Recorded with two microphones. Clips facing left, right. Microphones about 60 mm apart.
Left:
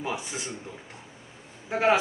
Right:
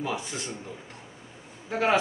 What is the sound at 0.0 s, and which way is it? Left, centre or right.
Speech, centre.